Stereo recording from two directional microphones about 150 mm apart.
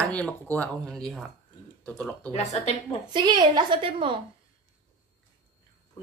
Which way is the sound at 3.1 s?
25° right (ahead or behind).